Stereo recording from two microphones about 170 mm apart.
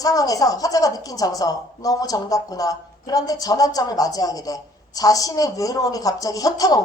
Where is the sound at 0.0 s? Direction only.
20° left (ahead or behind).